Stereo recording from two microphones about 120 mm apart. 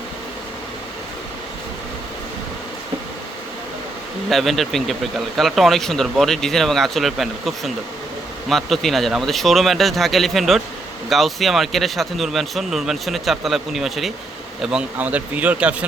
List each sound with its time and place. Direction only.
4.3 s speech: centre (ahead or behind)